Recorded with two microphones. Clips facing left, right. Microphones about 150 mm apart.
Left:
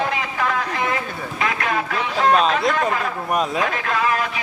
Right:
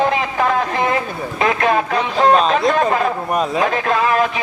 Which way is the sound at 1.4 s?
30° right (ahead or behind).